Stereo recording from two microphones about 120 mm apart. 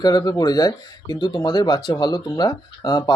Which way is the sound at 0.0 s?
30° left (ahead or behind).